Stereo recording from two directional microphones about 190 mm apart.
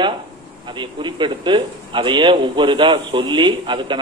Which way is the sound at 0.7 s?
25° right (ahead or behind).